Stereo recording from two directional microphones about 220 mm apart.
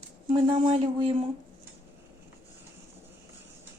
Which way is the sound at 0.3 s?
25° right (ahead or behind).